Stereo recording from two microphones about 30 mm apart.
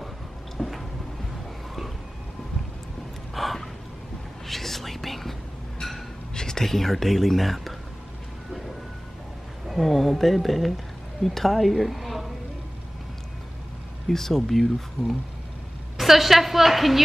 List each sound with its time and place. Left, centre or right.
0.6 s a sound: centre
3.3 s gasp: centre
4.5 s whispering: centre
6.3 s whispering: left
6.6 s speech: centre
9.7 s a woman's voice: centre
14.0 s speech: centre